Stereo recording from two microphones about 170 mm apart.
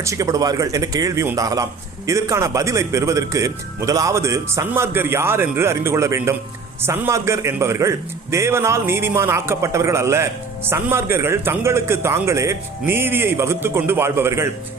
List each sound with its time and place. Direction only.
0.0 s a man's voice: 20° right (ahead or behind)